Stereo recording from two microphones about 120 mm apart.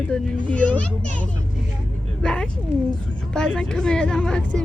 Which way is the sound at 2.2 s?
5° left (ahead or behind).